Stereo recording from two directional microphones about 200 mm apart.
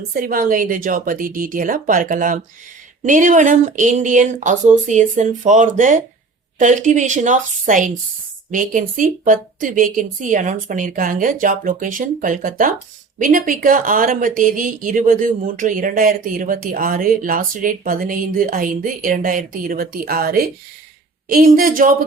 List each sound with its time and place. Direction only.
0.1 s a woman's voice: 45° right (ahead or behind)